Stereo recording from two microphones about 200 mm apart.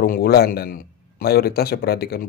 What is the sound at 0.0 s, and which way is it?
A man's voice, 50° left (ahead or behind).